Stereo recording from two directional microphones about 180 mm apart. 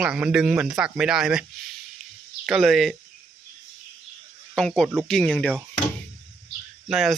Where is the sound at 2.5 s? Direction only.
Centre (ahead or behind).